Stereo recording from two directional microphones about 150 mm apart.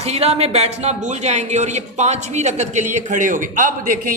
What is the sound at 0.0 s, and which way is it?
A woman's voice, 45° right (ahead or behind).